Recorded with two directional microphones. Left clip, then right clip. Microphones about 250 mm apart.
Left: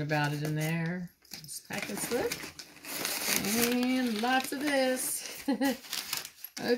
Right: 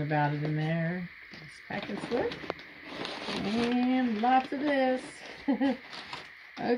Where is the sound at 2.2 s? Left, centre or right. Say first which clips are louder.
Right 1 dB; left.